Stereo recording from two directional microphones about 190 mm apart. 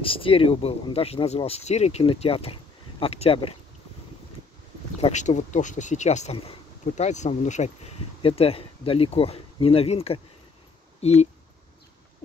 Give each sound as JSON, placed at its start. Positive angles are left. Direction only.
{"t": 0.0, "sound": "speech", "side_deg": 30}
{"t": 5.0, "sound": "speech", "side_deg": 40}